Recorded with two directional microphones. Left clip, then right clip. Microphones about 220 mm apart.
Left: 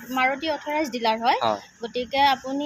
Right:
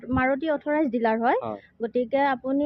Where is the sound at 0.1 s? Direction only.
40° right (ahead or behind).